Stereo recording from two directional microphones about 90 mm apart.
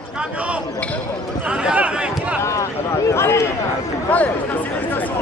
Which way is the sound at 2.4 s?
30° left (ahead or behind).